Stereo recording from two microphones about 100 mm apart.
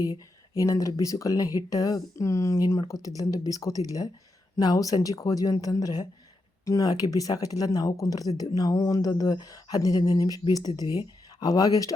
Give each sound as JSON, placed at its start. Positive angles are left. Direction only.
{"t": 0.5, "sound": "speech", "side_deg": 30}